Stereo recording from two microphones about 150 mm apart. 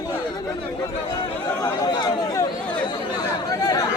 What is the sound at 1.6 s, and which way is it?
Chatter, 25° left (ahead or behind).